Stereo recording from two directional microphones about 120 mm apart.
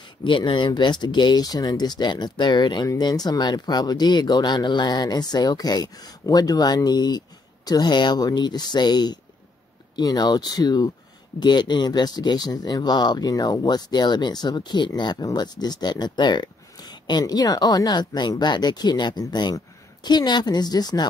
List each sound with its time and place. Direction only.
0.2 s speech: 40° left (ahead or behind)